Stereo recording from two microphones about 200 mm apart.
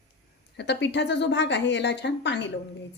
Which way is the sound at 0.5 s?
60° left (ahead or behind).